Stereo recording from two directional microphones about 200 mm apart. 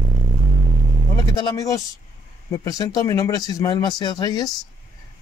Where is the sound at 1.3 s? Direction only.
20° left (ahead or behind).